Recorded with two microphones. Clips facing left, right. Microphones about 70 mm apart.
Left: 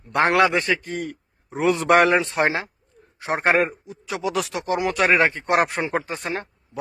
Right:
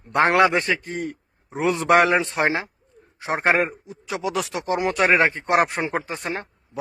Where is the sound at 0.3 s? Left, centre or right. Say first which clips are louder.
Even; right; by 2.6 s centre.